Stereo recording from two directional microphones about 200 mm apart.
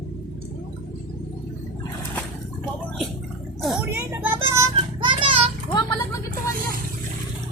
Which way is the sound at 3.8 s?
10° right (ahead or behind).